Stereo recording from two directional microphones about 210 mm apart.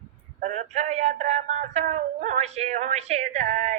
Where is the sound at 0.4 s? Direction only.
35° right (ahead or behind).